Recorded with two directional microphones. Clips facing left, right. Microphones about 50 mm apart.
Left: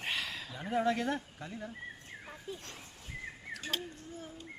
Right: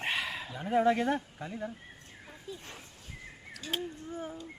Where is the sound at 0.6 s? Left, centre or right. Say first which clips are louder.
Right 5 dB; centre.